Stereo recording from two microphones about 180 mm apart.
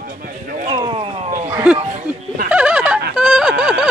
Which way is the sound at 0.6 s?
30° right (ahead or behind).